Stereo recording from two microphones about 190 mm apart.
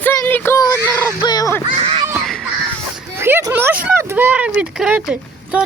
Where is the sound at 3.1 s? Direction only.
10° right (ahead or behind).